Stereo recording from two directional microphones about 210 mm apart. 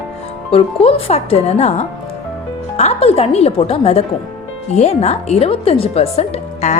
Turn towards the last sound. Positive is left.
turn(degrees=30)  # may be behind; listen again after turning